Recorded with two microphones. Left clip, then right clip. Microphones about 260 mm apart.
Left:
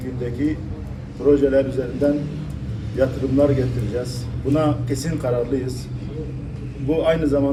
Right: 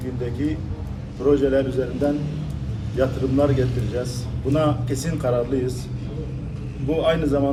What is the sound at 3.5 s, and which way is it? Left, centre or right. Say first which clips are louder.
A man's voice: left 1 dB; centre.